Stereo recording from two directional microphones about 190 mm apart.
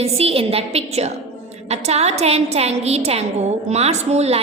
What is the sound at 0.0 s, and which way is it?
A woman's voice, 30° right (ahead or behind).